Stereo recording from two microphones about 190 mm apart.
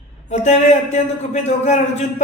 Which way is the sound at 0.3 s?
40° left (ahead or behind).